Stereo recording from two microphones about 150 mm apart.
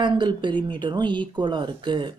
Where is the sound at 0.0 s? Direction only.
30° right (ahead or behind).